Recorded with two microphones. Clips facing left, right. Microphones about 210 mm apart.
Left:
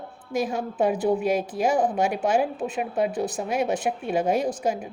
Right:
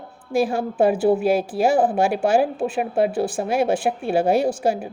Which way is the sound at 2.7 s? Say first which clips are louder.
Right 4 dB; 75° right (ahead or behind).